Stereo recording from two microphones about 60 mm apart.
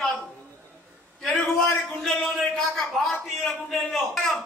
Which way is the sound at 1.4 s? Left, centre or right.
Centre.